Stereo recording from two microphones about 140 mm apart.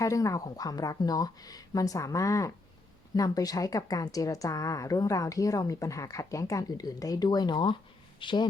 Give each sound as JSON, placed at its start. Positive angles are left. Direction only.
{"t": 0.0, "sound": "a woman's voice", "side_deg": 25}